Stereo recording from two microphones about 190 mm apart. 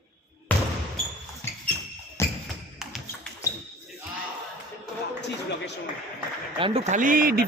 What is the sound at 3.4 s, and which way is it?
Basketball bounce, 15° left (ahead or behind).